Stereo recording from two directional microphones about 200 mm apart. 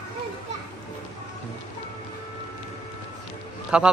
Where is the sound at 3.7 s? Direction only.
5° right (ahead or behind).